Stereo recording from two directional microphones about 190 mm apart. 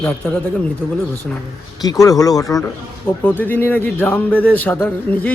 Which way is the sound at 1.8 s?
20° left (ahead or behind).